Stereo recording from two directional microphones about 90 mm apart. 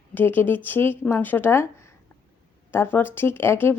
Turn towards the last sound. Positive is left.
turn(degrees=25)  # may be behind; listen again after turning